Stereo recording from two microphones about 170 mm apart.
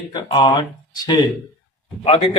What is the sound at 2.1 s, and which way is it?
Speech, 35° left (ahead or behind).